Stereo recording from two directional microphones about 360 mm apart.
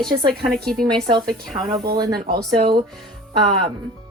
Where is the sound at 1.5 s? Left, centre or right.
Centre.